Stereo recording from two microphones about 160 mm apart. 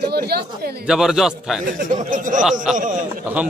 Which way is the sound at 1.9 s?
55° right (ahead or behind).